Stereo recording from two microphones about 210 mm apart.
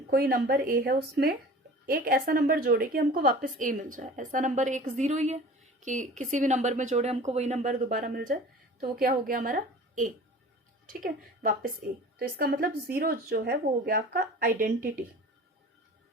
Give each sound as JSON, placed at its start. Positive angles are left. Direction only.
{"t": 0.1, "sound": "a woman's voice", "side_deg": -45}